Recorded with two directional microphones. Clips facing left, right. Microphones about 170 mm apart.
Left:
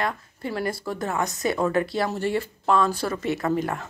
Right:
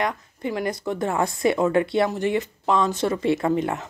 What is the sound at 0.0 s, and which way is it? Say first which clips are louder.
A woman's voice: right 2 dB; 15° right (ahead or behind).